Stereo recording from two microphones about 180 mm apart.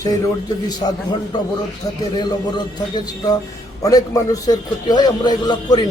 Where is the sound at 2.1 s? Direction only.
25° left (ahead or behind).